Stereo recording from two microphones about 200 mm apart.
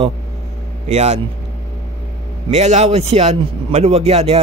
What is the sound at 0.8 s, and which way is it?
Speech, 35° right (ahead or behind).